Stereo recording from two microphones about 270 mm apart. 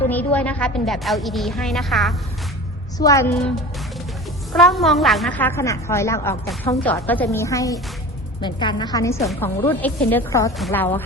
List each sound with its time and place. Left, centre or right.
0.1 s a woman's voice: centre
3.0 s a woman's voice: centre
4.5 s a woman's voice: centre